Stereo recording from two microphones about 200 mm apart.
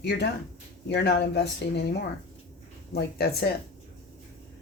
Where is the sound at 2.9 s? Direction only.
50° left (ahead or behind).